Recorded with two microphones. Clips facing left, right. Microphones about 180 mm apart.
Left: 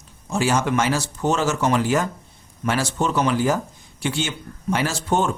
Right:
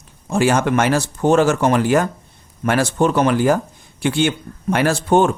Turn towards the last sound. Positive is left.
turn(degrees=-60)  # may be behind; listen again after turning